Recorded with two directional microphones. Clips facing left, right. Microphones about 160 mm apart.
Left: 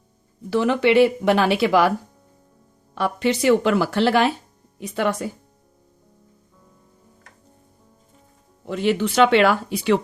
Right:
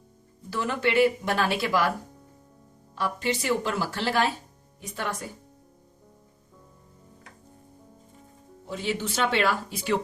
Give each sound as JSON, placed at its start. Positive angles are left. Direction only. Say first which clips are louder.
{"t": 0.5, "sound": "speech", "louder": "left 8 dB", "side_deg": 75}
{"t": 2.9, "sound": "speech", "louder": "left 7 dB", "side_deg": 75}
{"t": 8.6, "sound": "speech", "louder": "left 9 dB", "side_deg": 70}